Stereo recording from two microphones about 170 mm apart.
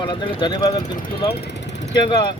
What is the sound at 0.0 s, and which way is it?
Speech, 25° left (ahead or behind).